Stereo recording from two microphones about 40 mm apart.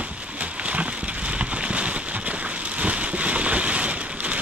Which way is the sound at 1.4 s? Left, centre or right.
Right.